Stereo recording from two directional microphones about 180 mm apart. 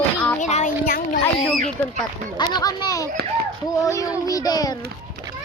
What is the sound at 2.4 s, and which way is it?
Speech, 25° left (ahead or behind).